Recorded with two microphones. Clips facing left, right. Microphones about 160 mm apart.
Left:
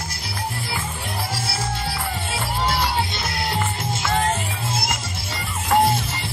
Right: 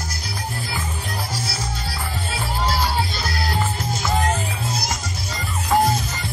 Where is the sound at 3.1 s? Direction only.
20° left (ahead or behind).